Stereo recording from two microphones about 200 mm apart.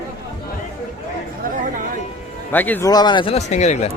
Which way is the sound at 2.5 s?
10° left (ahead or behind).